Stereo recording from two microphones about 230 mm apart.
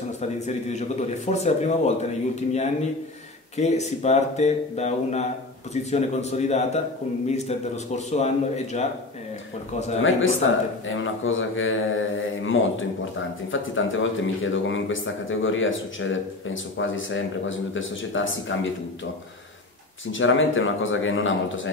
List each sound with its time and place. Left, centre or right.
0.5 s speech: left
10.9 s speech: left
20.1 s speech: left